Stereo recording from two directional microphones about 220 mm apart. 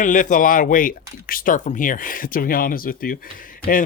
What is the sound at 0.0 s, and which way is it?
Speech, 35° left (ahead or behind).